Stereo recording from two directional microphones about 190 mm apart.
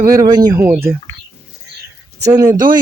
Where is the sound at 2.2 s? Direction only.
20° right (ahead or behind).